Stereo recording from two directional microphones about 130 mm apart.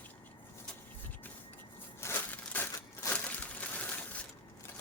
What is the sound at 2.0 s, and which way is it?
Crushing, 20° left (ahead or behind).